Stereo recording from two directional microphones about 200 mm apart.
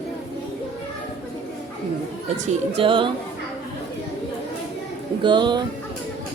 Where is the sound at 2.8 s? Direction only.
25° right (ahead or behind).